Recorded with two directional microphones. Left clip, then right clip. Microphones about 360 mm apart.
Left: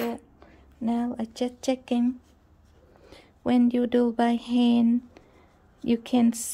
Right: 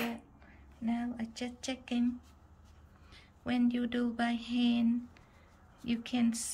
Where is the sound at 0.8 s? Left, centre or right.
Centre.